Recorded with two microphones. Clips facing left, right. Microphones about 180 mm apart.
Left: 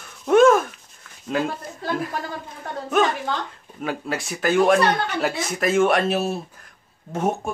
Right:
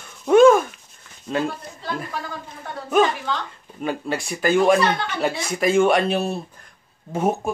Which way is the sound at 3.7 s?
Centre (ahead or behind).